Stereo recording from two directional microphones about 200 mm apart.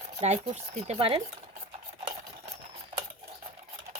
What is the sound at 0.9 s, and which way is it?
Speech, 25° right (ahead or behind).